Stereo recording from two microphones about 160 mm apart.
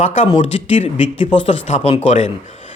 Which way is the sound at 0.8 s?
40° left (ahead or behind).